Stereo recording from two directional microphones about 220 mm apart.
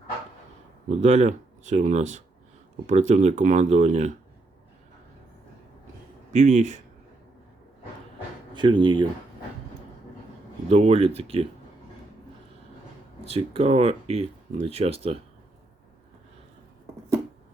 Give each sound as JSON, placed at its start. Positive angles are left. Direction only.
{"t": 0.9, "sound": "speech", "side_deg": -30}
{"t": 6.3, "sound": "speech", "side_deg": -30}
{"t": 8.5, "sound": "speech", "side_deg": -20}
{"t": 10.7, "sound": "speech", "side_deg": -30}
{"t": 13.2, "sound": "speech", "side_deg": -25}